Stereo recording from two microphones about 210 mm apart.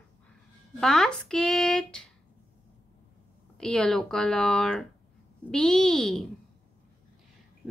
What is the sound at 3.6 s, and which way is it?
Speech, 5° left (ahead or behind).